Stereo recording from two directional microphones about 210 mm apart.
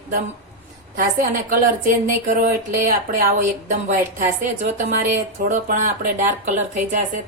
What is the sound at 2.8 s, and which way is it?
Speech, 40° right (ahead or behind).